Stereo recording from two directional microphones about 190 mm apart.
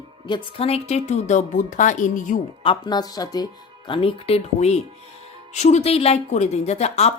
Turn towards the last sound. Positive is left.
turn(degrees=35)  # may be behind; listen again after turning